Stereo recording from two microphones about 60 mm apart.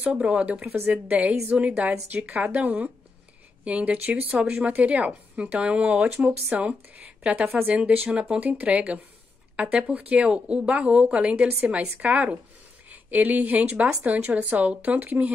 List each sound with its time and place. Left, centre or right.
0.0 s a woman's voice: centre